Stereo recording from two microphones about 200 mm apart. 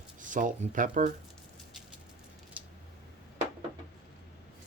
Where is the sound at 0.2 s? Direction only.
40° right (ahead or behind).